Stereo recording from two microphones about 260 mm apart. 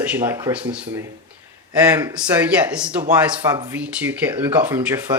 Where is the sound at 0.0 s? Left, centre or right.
Centre.